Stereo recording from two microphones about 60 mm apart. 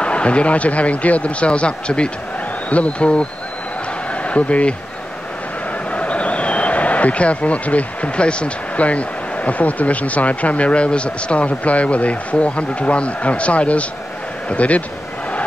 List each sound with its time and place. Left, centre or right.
0.0 s speech: centre
4.1 s a sound: left
5.9 s a man's voice: left